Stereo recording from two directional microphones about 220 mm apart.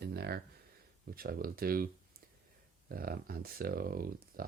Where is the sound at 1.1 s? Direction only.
40° right (ahead or behind).